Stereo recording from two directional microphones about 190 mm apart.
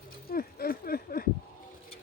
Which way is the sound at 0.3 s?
50° left (ahead or behind).